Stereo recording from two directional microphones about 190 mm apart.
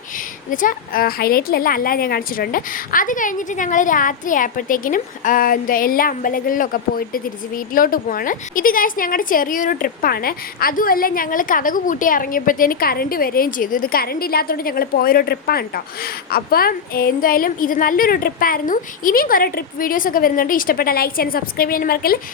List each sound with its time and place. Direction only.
0.5 s a woman's voice: 45° left (ahead or behind)